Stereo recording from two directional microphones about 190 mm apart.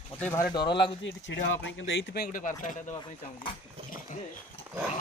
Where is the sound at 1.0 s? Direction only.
75° left (ahead or behind); by 2.8 s 45° left (ahead or behind).